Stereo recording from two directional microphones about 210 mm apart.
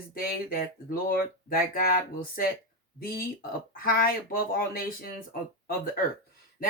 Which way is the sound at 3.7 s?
45° left (ahead or behind).